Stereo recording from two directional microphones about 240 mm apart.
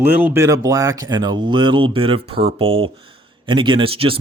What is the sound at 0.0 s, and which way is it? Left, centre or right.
Speech, centre.